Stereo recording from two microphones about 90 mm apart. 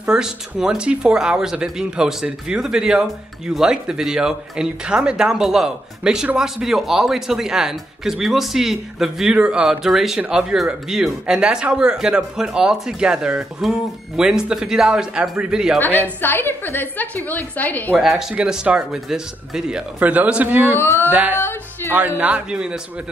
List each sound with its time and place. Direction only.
0.0 s a man's voice: 5° right (ahead or behind)
15.8 s a woman's voice: 20° left (ahead or behind)
17.9 s a man's voice: 5° right (ahead or behind)
20.7 s a woman's voice: 25° left (ahead or behind)
21.1 s music: 20° right (ahead or behind)
21.9 s a man's voice: 15° right (ahead or behind)